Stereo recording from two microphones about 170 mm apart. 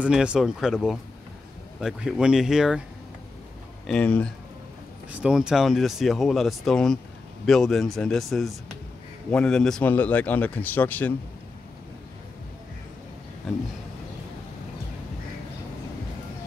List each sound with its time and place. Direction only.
0.0 s speech: 5° right (ahead or behind)
3.8 s speech: 5° left (ahead or behind)
5.2 s a man's voice: 5° right (ahead or behind)